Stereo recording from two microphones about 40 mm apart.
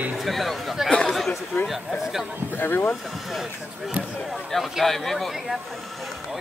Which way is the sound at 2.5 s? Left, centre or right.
Left.